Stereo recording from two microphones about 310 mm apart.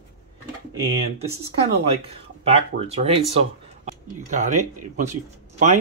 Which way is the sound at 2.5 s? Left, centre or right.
Centre.